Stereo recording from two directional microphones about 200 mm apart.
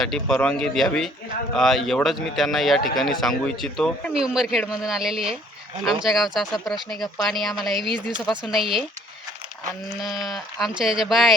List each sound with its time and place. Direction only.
0.0 s speech: centre (ahead or behind)
7.8 s speech: 25° right (ahead or behind)
8.4 s speech: centre (ahead or behind)
10.0 s speech: centre (ahead or behind)